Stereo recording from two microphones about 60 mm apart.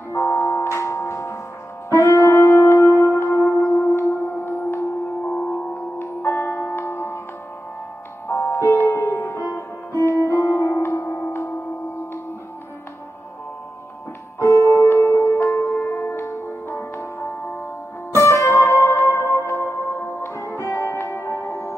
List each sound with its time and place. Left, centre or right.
0.1 s music: left
8.3 s music: left
14.4 s music: left
18.1 s music: left